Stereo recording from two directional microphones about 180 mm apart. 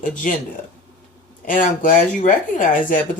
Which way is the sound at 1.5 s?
50° left (ahead or behind).